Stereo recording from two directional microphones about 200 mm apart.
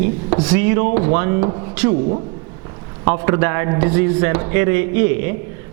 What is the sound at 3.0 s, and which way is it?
A man's voice, 15° right (ahead or behind).